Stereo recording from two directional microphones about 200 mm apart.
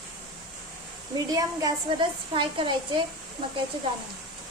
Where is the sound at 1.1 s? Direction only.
20° right (ahead or behind).